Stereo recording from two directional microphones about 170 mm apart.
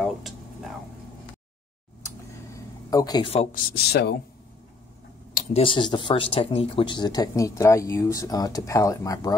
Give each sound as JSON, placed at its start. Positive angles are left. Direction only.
{"t": 0.0, "sound": "a sound", "side_deg": 0}
{"t": 2.0, "sound": "vehicle", "side_deg": 20}
{"t": 3.5, "sound": "speech", "side_deg": 70}
{"t": 5.5, "sound": "speech", "side_deg": 30}